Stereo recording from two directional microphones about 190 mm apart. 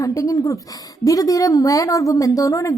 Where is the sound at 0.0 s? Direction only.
15° left (ahead or behind).